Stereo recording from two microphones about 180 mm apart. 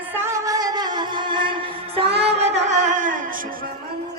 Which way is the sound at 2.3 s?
35° right (ahead or behind).